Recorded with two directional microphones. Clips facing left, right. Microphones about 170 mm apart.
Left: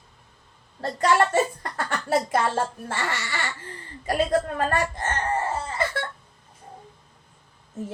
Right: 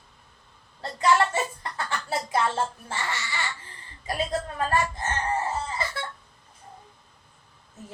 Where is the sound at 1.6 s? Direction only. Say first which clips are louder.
Left 2 dB; 55° left (ahead or behind).